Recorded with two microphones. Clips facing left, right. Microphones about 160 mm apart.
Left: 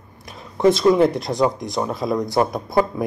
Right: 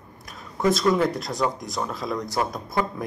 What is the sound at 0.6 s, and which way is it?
Speech, 30° left (ahead or behind).